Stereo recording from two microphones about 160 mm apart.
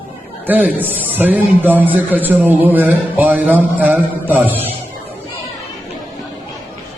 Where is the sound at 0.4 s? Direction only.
10° right (ahead or behind).